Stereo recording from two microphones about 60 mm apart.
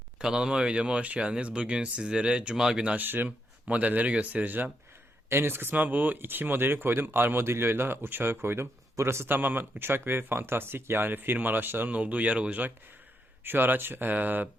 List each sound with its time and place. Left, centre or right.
0.2 s speech: centre
3.0 s speech: right
11.9 s speech: right
13.4 s speech: right